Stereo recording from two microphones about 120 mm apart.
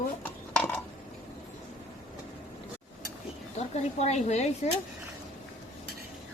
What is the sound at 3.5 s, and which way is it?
Speech, 65° left (ahead or behind).